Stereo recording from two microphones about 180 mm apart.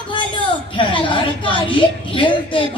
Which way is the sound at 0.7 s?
30° left (ahead or behind).